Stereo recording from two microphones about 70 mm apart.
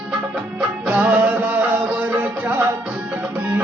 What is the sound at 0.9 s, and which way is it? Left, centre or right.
Music, right.